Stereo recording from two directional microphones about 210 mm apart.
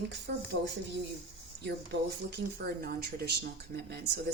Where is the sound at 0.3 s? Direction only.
50° right (ahead or behind).